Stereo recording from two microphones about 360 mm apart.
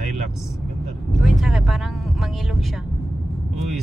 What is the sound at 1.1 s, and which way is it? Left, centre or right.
Speech, centre.